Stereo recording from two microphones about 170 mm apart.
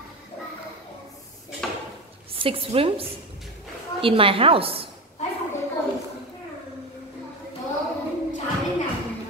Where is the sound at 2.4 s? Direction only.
30° right (ahead or behind).